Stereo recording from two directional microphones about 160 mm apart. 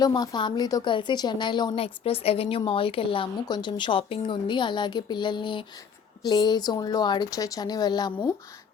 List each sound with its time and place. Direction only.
0.0 s speech: 25° left (ahead or behind)